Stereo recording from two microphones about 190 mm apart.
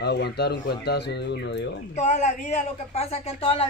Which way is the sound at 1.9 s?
35° left (ahead or behind).